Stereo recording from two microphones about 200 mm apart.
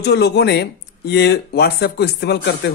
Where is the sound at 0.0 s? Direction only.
55° left (ahead or behind).